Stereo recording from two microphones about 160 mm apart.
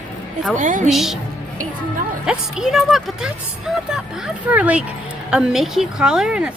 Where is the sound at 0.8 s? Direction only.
Centre (ahead or behind).